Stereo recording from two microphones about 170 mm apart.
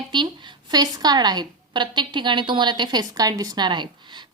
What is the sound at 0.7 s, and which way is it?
Speech, 25° right (ahead or behind).